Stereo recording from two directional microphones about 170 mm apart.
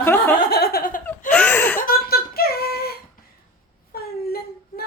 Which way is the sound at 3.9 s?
65° left (ahead or behind).